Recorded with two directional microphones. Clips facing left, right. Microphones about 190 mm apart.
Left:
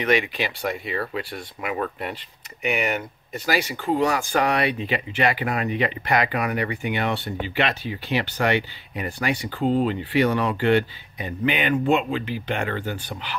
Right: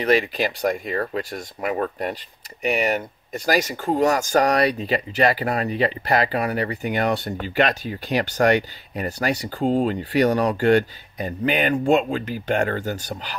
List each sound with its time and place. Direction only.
0.0 s speech: 35° right (ahead or behind)